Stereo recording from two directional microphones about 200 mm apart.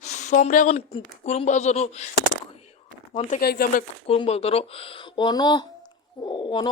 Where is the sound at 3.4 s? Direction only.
50° left (ahead or behind).